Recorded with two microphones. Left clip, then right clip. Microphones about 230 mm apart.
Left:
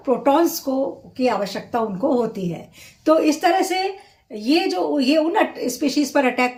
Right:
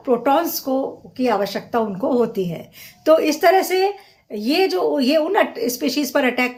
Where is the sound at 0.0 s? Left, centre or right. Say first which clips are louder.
Even; centre.